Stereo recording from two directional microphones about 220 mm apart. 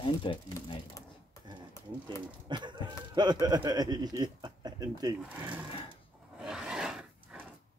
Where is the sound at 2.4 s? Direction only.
20° right (ahead or behind).